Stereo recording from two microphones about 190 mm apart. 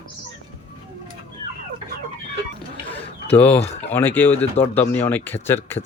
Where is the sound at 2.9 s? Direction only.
30° left (ahead or behind).